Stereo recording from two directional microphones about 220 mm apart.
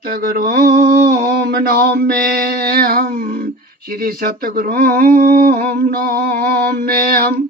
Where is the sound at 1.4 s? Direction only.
45° right (ahead or behind).